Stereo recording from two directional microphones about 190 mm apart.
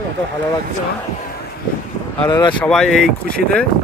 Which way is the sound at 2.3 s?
25° left (ahead or behind).